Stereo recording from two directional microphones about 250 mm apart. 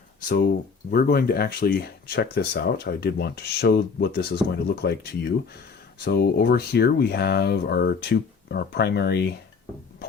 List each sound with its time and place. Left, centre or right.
0.2 s speech: left